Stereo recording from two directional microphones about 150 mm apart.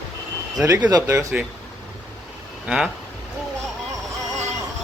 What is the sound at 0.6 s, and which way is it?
Speech, 20° right (ahead or behind).